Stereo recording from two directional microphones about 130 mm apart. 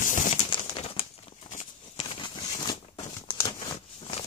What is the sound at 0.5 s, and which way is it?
Crumpling, 45° left (ahead or behind).